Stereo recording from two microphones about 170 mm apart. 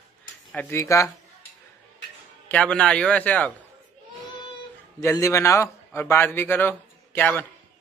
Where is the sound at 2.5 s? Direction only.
5° left (ahead or behind).